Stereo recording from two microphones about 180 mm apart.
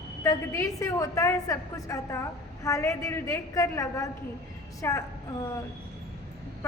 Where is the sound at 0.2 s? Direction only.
15° left (ahead or behind).